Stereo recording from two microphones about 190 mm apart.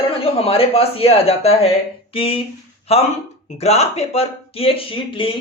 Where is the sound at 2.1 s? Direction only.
30° left (ahead or behind).